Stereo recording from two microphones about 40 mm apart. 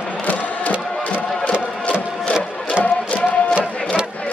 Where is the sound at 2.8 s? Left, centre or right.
Left.